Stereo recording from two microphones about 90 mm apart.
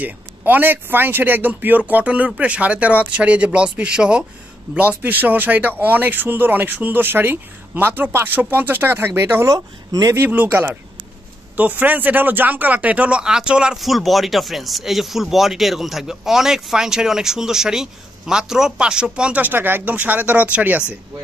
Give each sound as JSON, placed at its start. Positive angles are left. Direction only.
{"t": 0.0, "sound": "speech", "side_deg": -20}
{"t": 9.5, "sound": "speech", "side_deg": -40}
{"t": 10.1, "sound": "speech", "side_deg": -20}
{"t": 11.5, "sound": "speech", "side_deg": -20}